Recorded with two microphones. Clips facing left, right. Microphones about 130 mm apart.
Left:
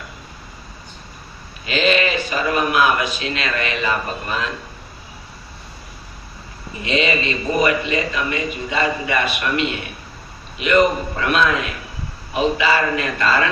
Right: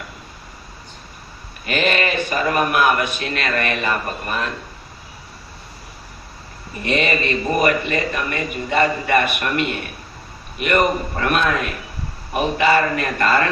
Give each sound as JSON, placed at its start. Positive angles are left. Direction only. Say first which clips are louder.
{"t": 1.6, "sound": "a man's voice", "louder": "left 2 dB", "side_deg": -55}
{"t": 6.8, "sound": "a man's voice", "louder": "even", "side_deg": -55}